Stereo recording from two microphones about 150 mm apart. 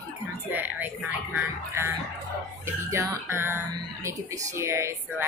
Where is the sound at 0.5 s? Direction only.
10° right (ahead or behind).